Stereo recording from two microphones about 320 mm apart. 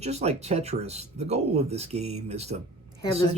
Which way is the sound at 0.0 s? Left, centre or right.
Centre.